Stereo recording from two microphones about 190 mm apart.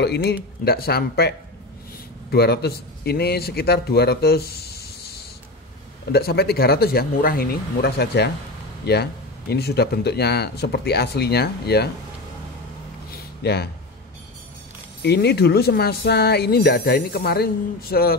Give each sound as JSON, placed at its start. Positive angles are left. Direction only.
{"t": 0.0, "sound": "speech", "side_deg": 60}
{"t": 2.3, "sound": "speech", "side_deg": 55}
{"t": 6.1, "sound": "speech", "side_deg": 55}
{"t": 13.4, "sound": "speech", "side_deg": 60}
{"t": 15.0, "sound": "speech", "side_deg": 60}